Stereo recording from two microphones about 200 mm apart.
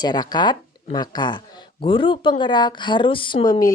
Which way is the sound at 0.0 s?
20° left (ahead or behind).